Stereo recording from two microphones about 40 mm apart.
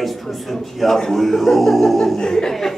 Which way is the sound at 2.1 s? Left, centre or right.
Centre.